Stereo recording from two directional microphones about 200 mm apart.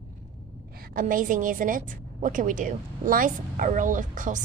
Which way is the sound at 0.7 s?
45° right (ahead or behind).